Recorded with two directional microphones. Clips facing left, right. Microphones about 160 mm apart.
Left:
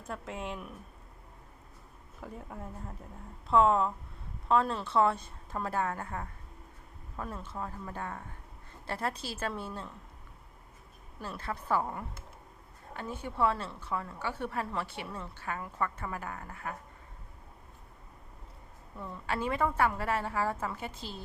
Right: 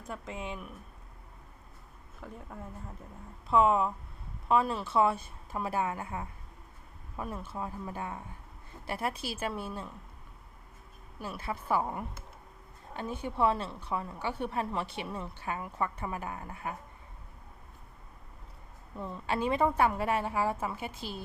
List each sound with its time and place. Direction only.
0.1 s speech: centre (ahead or behind)
2.2 s speech: 5° left (ahead or behind)
3.5 s a woman's voice: 5° right (ahead or behind)
11.2 s a woman's voice: 10° right (ahead or behind)
18.9 s a woman's voice: 20° right (ahead or behind)